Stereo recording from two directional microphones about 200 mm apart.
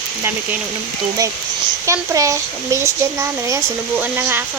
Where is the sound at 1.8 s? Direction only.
15° right (ahead or behind).